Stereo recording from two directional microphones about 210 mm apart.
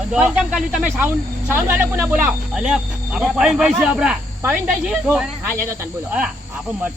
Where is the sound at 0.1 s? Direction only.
5° right (ahead or behind).